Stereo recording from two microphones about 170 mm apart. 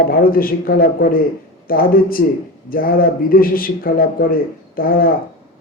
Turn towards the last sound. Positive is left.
turn(degrees=60)  # may be behind; listen again after turning